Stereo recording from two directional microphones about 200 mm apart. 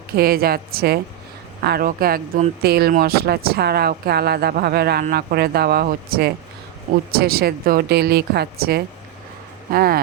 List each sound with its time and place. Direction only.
0.2 s speech: 50° right (ahead or behind)